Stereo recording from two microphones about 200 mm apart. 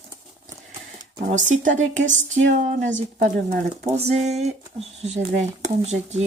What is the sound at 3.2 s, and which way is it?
Speech, 40° right (ahead or behind).